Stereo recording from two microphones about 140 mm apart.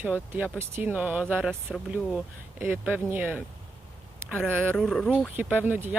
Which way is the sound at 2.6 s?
10° right (ahead or behind).